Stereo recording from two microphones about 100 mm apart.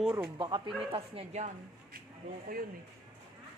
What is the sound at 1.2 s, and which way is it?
Speech, 75° right (ahead or behind).